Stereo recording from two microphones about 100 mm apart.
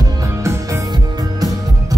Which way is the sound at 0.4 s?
30° right (ahead or behind).